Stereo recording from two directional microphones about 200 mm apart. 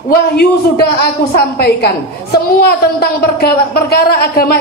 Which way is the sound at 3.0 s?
50° left (ahead or behind).